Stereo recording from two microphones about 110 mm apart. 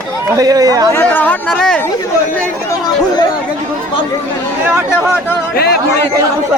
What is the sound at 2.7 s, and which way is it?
Speech, 35° left (ahead or behind).